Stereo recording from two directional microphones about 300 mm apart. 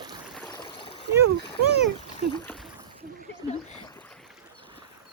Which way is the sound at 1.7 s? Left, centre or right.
Left.